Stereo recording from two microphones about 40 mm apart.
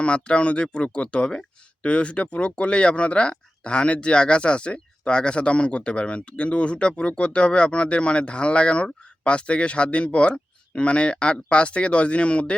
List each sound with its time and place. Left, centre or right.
0.0 s speech: left